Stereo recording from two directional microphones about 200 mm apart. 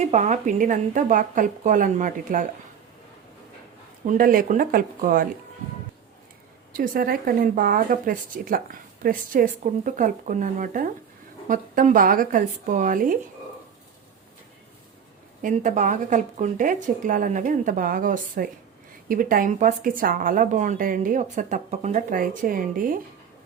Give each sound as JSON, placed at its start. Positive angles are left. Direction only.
{"t": 0.0, "sound": "speech", "side_deg": -35}
{"t": 4.0, "sound": "speech", "side_deg": -40}
{"t": 6.7, "sound": "speech", "side_deg": -45}
{"t": 15.4, "sound": "speech", "side_deg": -40}